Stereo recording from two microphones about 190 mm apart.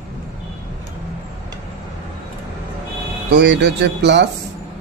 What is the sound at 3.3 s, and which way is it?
Speech, 65° right (ahead or behind).